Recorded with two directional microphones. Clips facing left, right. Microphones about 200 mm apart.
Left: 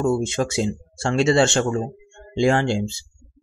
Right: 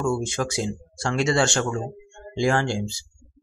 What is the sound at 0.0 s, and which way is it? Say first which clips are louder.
Speech: left 4 dB; 20° left (ahead or behind).